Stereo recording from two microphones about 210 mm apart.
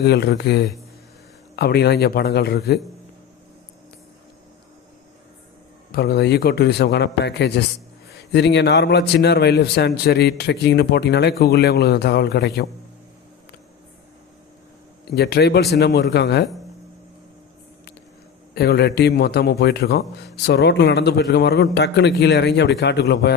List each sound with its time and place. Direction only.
0.0 s a man's voice: 50° left (ahead or behind)
5.9 s a man's voice: 50° left (ahead or behind)
15.1 s a man's voice: 50° left (ahead or behind)
18.5 s a man's voice: 50° left (ahead or behind)